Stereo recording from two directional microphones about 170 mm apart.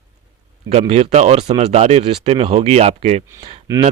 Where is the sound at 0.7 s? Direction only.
35° right (ahead or behind).